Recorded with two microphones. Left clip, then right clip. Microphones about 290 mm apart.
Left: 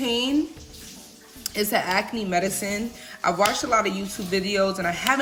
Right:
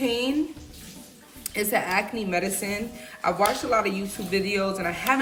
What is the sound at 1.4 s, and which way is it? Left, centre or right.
Speech, centre.